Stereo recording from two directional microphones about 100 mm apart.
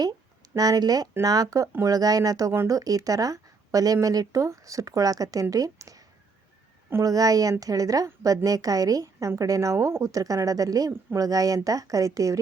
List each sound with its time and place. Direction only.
0.5 s speech: 40° right (ahead or behind)
7.0 s speech: 35° right (ahead or behind)